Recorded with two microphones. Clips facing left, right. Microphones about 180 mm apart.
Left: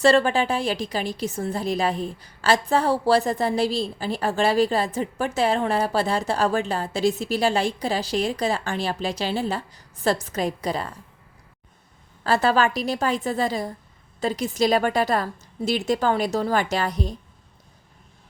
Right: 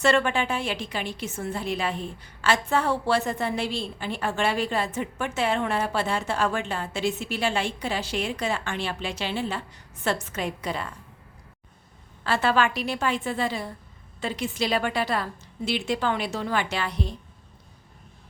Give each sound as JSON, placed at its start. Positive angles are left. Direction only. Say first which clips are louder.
{"t": 0.0, "sound": "a woman's voice", "louder": "left 4 dB", "side_deg": 35}
{"t": 12.2, "sound": "a woman's voice", "louder": "left 3 dB", "side_deg": 40}